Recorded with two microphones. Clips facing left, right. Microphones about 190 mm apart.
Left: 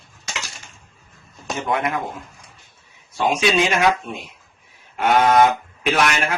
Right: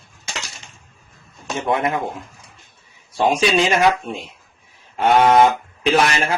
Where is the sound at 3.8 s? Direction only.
30° right (ahead or behind).